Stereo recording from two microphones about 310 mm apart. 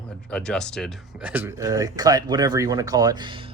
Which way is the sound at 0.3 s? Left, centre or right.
Centre.